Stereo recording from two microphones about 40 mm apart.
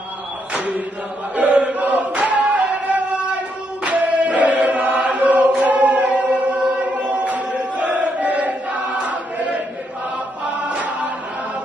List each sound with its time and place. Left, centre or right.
0.6 s a sound: right
1.3 s chant: right
2.6 s music: right
3.8 s choir: right
5.2 s chant: right
6.9 s choir: right
10.4 s choir: right